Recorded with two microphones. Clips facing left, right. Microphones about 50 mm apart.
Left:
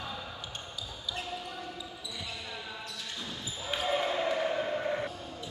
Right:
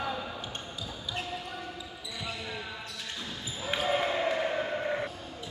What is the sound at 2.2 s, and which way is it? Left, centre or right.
Basketball bounce, right.